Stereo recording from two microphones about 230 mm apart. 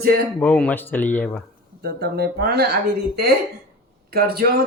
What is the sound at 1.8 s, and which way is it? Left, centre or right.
Speech, right.